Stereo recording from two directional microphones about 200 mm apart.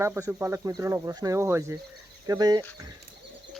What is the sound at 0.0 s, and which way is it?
Speech, 10° right (ahead or behind).